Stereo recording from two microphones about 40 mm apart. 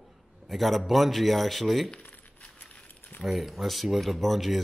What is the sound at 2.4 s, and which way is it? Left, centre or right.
Keys jangling, left.